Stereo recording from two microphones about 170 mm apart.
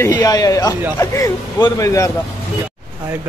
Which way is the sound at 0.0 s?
20° left (ahead or behind).